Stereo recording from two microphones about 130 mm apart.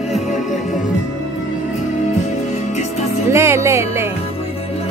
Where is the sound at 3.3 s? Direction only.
20° right (ahead or behind).